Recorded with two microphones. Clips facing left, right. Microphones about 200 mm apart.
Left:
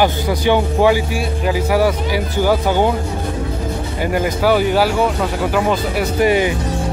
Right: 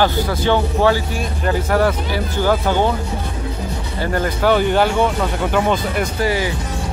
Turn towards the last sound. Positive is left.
turn(degrees=20)  # may be behind; listen again after turning